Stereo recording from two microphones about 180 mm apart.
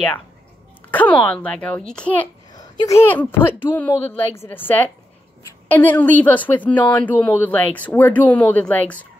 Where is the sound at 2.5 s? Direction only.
20° left (ahead or behind).